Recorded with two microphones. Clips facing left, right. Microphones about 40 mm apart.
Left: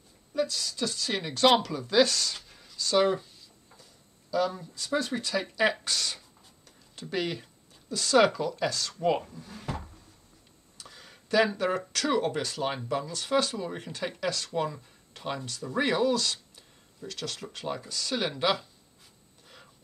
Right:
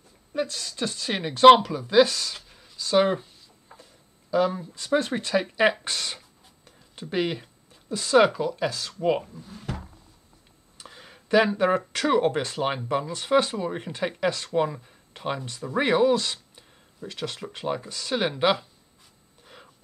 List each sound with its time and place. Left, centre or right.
0.3 s speech: right; by 3.1 s centre
3.7 s speech: right; by 9.4 s centre
10.8 s speech: right
19.4 s a sound: centre